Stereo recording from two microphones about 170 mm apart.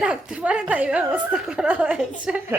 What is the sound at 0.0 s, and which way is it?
A woman's voice, 5° right (ahead or behind).